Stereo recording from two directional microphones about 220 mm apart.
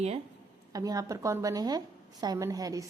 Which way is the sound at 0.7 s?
15° right (ahead or behind).